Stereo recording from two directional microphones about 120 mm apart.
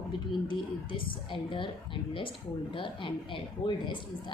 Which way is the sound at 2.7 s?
45° left (ahead or behind).